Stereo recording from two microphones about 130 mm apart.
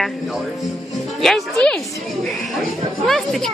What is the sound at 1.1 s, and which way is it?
Speech, centre (ahead or behind).